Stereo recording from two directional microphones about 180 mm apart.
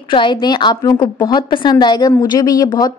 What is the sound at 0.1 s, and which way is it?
Speech, 25° left (ahead or behind).